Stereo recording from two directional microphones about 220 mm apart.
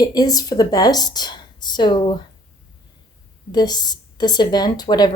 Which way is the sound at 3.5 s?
20° left (ahead or behind).